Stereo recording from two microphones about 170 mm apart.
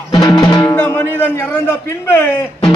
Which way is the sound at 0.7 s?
10° left (ahead or behind).